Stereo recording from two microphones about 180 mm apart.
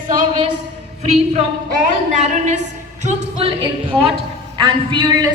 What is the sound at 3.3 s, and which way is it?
A woman's voice, 30° right (ahead or behind).